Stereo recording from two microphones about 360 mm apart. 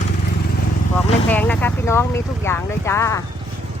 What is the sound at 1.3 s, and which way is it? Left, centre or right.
Speech, centre.